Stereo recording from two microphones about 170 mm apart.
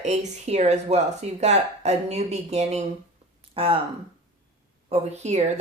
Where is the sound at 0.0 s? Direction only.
45° right (ahead or behind).